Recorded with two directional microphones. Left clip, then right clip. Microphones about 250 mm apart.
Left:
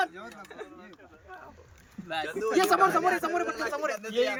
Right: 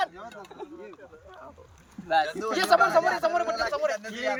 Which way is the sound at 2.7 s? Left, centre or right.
Centre.